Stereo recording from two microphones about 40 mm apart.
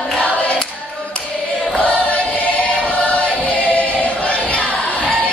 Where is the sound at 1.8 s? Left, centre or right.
Left.